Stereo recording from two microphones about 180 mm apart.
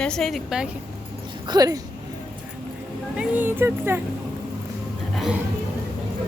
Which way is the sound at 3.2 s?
10° right (ahead or behind).